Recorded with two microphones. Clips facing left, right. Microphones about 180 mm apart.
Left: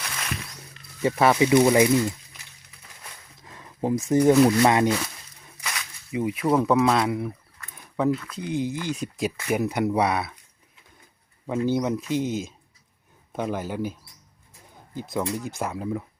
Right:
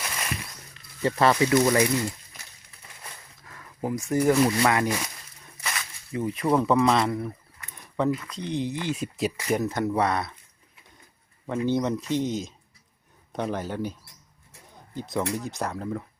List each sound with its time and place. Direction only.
0.0 s a sound: 5° right (ahead or behind)
1.0 s speech: 10° left (ahead or behind)
3.4 s a sound: 25° left (ahead or behind)
4.4 s speech: 25° left (ahead or behind)
4.9 s speech: 15° right (ahead or behind)
6.1 s speech: 10° left (ahead or behind)
7.8 s a sound: 5° left (ahead or behind)
8.3 s speech: 5° left (ahead or behind)
9.5 s speech: 10° left (ahead or behind)
11.4 s speech: 5° left (ahead or behind)
14.9 s speech: centre (ahead or behind)